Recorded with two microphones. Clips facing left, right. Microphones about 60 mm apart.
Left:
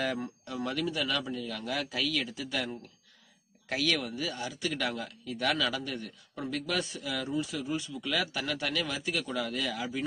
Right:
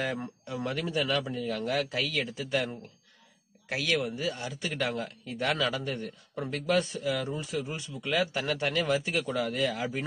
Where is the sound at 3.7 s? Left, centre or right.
Centre.